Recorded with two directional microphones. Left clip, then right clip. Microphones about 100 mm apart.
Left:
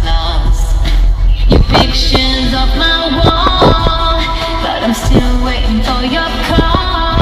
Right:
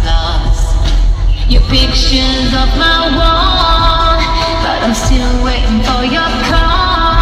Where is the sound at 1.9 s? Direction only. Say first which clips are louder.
Even; 40° left (ahead or behind).